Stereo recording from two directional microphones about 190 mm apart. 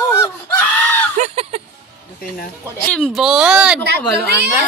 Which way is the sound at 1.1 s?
35° right (ahead or behind).